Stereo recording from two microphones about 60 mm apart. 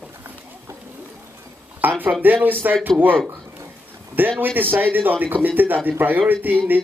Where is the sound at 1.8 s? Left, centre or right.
Right.